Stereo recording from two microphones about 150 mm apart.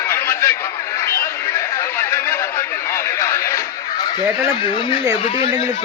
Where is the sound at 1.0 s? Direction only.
20° left (ahead or behind).